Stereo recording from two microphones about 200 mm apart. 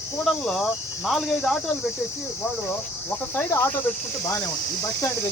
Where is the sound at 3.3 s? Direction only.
10° left (ahead or behind).